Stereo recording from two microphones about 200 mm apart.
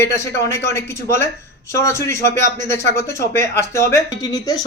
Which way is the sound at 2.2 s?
40° right (ahead or behind).